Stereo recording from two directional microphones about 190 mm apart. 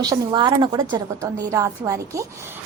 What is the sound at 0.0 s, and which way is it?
A woman's voice, 20° right (ahead or behind).